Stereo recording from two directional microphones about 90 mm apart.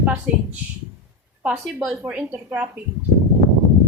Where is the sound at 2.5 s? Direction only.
20° right (ahead or behind).